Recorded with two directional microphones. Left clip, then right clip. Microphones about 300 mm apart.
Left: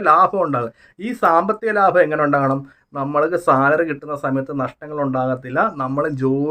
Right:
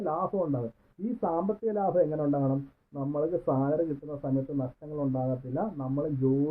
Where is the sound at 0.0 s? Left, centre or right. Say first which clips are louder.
Left 16 dB; left.